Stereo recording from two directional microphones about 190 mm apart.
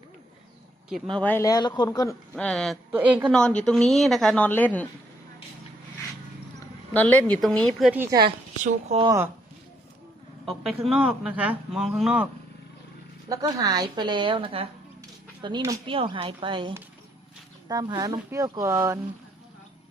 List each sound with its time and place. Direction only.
1.2 s speech: 10° left (ahead or behind)
2.3 s speech: 5° left (ahead or behind)
2.9 s speech: 10° right (ahead or behind)
3.3 s speech: 5° left (ahead or behind)
6.9 s a woman's voice: 10° left (ahead or behind)
7.9 s speech: 10° right (ahead or behind)
8.6 s speech: 35° right (ahead or behind)
9.0 s speech: 15° right (ahead or behind)
10.4 s speech: centre (ahead or behind)
13.2 s a woman's voice: 20° right (ahead or behind)